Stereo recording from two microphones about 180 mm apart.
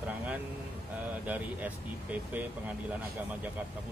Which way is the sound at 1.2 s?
10° right (ahead or behind).